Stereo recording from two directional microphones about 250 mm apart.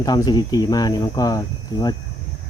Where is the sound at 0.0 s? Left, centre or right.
Centre.